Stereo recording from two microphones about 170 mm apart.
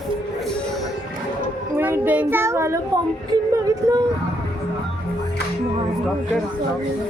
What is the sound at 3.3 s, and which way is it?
Female singing, 20° right (ahead or behind).